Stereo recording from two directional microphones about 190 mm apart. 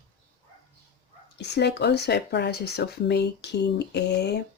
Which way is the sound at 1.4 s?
65° left (ahead or behind).